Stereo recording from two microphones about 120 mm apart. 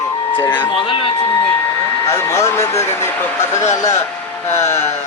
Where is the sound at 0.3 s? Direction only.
15° left (ahead or behind).